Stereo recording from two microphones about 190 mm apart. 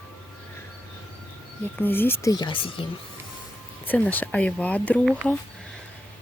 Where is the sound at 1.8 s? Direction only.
10° left (ahead or behind); by 2.8 s 25° left (ahead or behind).